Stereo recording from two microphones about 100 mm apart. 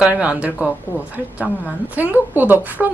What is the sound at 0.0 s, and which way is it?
Speech, 15° right (ahead or behind).